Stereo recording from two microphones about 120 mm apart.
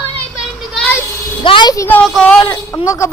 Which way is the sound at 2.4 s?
25° left (ahead or behind).